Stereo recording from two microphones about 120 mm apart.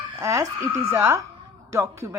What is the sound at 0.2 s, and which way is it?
A child's voice, 25° right (ahead or behind).